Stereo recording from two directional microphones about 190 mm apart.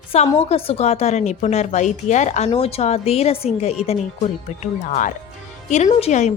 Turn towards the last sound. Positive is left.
turn(degrees=35)  # may be behind; listen again after turning